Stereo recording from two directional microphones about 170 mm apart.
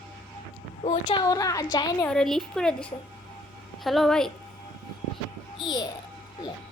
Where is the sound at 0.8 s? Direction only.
30° left (ahead or behind).